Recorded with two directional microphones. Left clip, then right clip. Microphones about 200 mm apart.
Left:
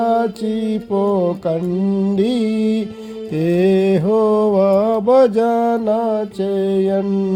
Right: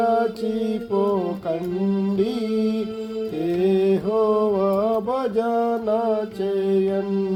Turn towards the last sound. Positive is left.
turn(degrees=60)  # may be behind; listen again after turning